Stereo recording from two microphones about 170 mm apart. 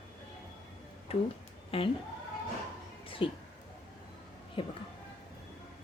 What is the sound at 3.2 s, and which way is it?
Speech, 30° left (ahead or behind).